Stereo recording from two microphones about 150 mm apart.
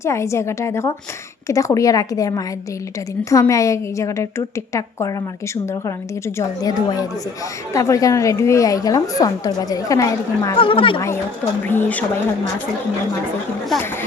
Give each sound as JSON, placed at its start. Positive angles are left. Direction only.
{"t": 0.0, "sound": "a woman's voice", "side_deg": 20}
{"t": 10.6, "sound": "speech", "side_deg": 35}
{"t": 11.6, "sound": "speech", "side_deg": 15}